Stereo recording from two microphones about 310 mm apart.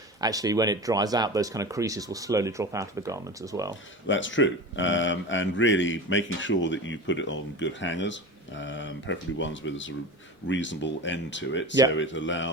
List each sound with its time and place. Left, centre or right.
0.2 s speech: centre
4.0 s speech: left